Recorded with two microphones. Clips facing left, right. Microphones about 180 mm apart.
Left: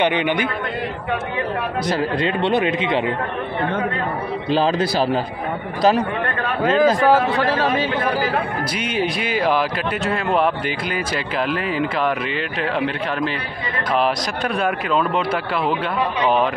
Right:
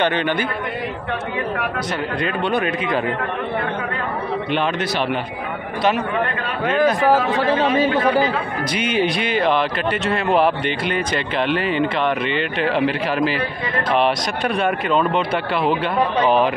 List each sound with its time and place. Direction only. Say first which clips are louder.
0.0 s a man's voice: left 1 dB; 15° left (ahead or behind)
1.9 s speech: left 3 dB; 25° left (ahead or behind)
4.5 s speech: left 6 dB; 30° left (ahead or behind)
7.3 s a man's voice: right 1 dB; 20° right (ahead or behind)
8.7 s speech: right 4 dB; centre (ahead or behind)